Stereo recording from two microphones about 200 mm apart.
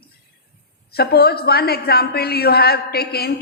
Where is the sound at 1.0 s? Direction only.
50° left (ahead or behind).